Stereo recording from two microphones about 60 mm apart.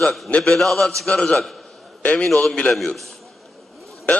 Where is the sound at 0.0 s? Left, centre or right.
Centre.